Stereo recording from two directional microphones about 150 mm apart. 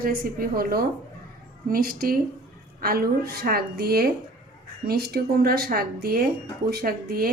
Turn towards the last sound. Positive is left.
turn(degrees=-85)